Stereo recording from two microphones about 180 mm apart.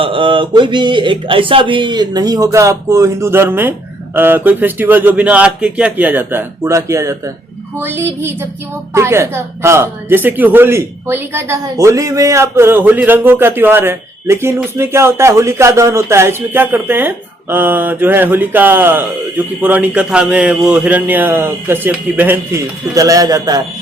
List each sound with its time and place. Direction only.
0.0 s speech: 30° right (ahead or behind)